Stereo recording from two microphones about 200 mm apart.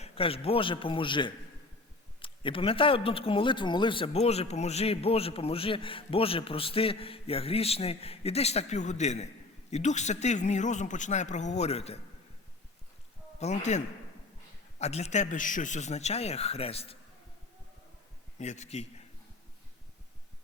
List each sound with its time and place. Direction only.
0.0 s a man's voice: 30° left (ahead or behind)
13.4 s a man's voice: 35° left (ahead or behind)
18.3 s a man's voice: 35° left (ahead or behind)